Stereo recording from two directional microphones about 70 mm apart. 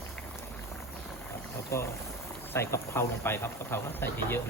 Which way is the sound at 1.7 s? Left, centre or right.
Left.